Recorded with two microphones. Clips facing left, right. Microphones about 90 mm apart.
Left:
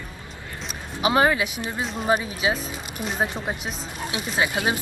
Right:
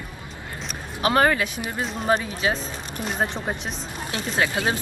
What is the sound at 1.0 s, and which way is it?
Speech, 10° left (ahead or behind).